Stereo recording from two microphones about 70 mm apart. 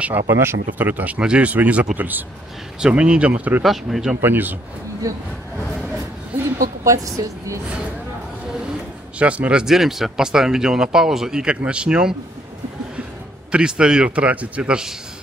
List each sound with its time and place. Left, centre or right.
0.0 s speech: right
3.6 s speech: centre
4.2 s speech: right
5.1 s a woman's voice: right
6.8 s a woman's voice: right
9.2 s speech: centre
13.5 s speech: centre